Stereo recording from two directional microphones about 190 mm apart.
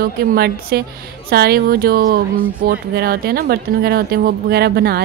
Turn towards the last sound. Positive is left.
turn(degrees=-55)  # may be behind; listen again after turning